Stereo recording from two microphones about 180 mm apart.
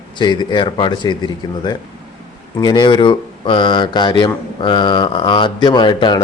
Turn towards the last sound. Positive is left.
turn(degrees=25)  # may be behind; listen again after turning